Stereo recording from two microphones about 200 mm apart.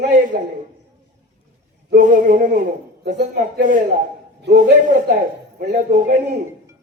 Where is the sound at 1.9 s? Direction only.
40° right (ahead or behind).